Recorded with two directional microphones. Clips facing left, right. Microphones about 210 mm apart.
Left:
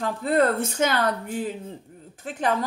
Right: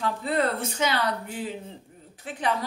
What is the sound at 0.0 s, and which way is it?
Speech, 50° left (ahead or behind).